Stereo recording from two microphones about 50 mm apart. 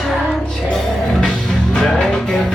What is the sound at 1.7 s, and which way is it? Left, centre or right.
Music, centre.